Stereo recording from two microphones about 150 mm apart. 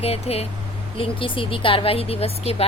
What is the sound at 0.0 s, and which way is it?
Speech, 40° left (ahead or behind).